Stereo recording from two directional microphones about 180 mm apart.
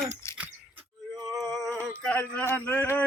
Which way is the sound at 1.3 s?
Centre (ahead or behind).